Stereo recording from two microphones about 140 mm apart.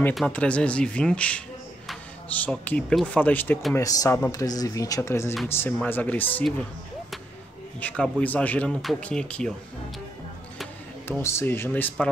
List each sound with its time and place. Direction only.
0.3 s speech: 10° left (ahead or behind)
3.7 s speech: 20° left (ahead or behind)
7.8 s speech: 10° left (ahead or behind)
11.1 s speech: 20° left (ahead or behind)